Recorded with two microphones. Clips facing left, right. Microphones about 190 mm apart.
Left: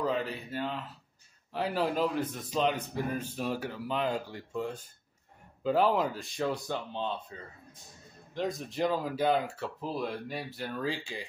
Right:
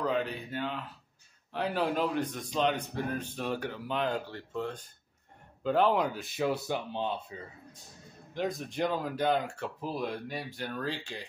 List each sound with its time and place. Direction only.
0.0 s a man's voice: 5° left (ahead or behind)
8.4 s a man's voice: centre (ahead or behind)